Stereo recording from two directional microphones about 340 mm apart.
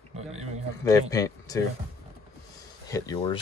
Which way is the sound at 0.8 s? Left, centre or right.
Centre.